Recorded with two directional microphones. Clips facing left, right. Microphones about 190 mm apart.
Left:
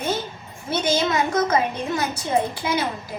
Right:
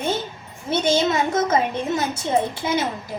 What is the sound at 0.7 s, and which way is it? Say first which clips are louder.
A woman's voice: right 2 dB; 25° right (ahead or behind).